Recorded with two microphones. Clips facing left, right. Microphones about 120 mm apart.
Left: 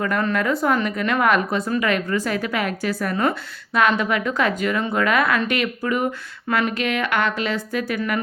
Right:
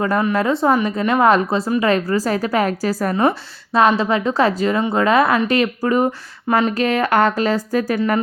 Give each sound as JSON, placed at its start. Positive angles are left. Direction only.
{"t": 0.3, "sound": "a woman's voice", "side_deg": -30}
{"t": 6.5, "sound": "a woman's voice", "side_deg": -25}
{"t": 6.7, "sound": "speech", "side_deg": -40}